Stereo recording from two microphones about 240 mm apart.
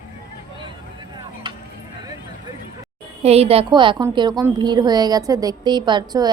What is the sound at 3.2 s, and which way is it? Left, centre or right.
A woman's voice, right.